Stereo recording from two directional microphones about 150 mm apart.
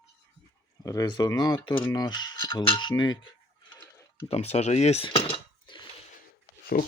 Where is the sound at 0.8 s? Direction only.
20° left (ahead or behind).